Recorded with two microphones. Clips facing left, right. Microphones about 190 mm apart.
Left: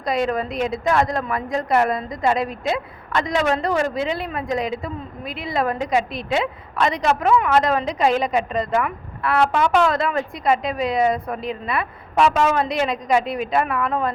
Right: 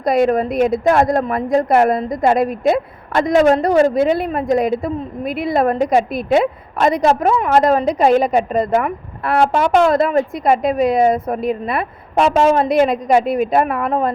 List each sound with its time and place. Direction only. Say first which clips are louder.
0.0 s a woman's voice: right 7 dB; 50° right (ahead or behind)
3.9 s a woman's voice: right 8 dB; 50° right (ahead or behind)
7.0 s a woman's voice: right 3 dB; 35° right (ahead or behind)
12.6 s a woman's voice: right 8 dB; 50° right (ahead or behind)